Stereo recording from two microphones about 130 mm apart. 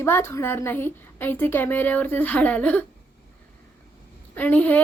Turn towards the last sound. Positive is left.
turn(degrees=15)  # may be behind; listen again after turning